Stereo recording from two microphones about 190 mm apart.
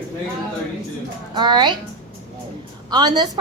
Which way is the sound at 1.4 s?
25° right (ahead or behind).